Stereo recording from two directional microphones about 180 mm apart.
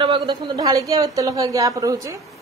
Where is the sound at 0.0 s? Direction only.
25° right (ahead or behind).